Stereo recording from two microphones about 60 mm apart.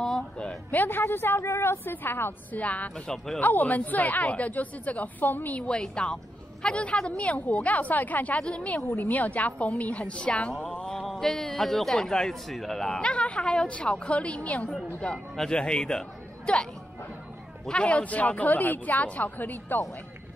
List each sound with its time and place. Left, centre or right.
0.0 s a sound: centre
0.7 s a woman's voice: left
2.5 s speech: left
8.9 s speech: left
10.7 s mantra: centre
11.0 s a man's voice: centre
13.0 s a man's voice: centre
17.6 s speech: left